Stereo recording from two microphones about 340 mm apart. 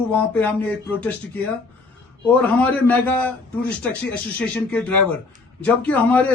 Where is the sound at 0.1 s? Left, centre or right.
Centre.